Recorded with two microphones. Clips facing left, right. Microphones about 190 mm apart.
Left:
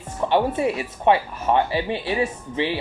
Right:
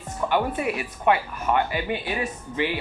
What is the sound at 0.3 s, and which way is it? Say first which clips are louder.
Speech: left 4 dB; 30° left (ahead or behind).